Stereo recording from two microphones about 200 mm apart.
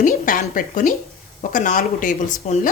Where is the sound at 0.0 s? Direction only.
40° left (ahead or behind).